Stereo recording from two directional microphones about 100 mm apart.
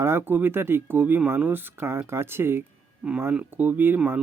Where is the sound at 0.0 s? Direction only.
25° right (ahead or behind).